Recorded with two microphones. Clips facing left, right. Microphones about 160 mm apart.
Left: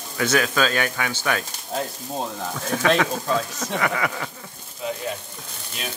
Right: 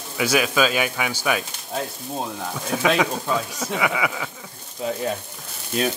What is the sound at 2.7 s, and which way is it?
Speech, 10° right (ahead or behind).